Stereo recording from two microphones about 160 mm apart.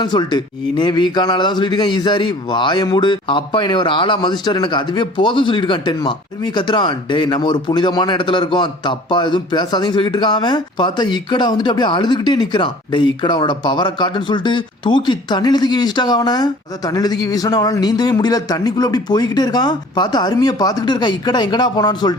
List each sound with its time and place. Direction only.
0.0 s a man's voice: 25° left (ahead or behind)